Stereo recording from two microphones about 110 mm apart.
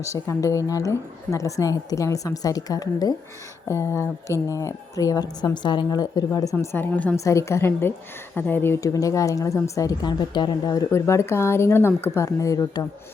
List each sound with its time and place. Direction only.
0.0 s a woman's voice: 25° left (ahead or behind)
6.6 s speech: 20° left (ahead or behind)
7.3 s a woman's voice: 25° left (ahead or behind)
10.9 s a woman's voice: 25° left (ahead or behind)